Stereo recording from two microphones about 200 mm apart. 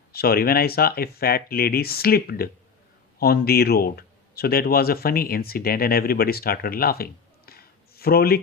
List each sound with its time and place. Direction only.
0.1 s speech: 50° left (ahead or behind)